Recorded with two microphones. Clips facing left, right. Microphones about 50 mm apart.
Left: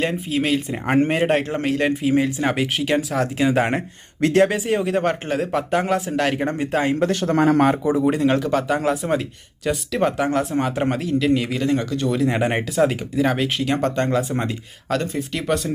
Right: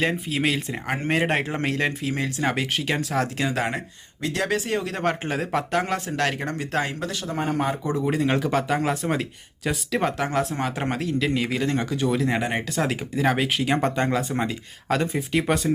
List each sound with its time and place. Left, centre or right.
0.0 s speech: centre
4.2 s speech: left
4.4 s speech: centre
7.1 s speech: left
7.9 s speech: centre
12.4 s speech: left
12.7 s speech: centre
14.9 s speech: centre